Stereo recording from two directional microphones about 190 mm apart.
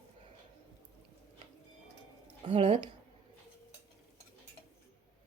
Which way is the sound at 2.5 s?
30° right (ahead or behind).